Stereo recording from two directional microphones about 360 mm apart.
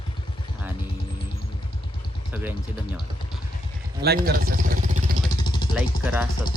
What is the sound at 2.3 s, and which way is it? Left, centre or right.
Speech, centre.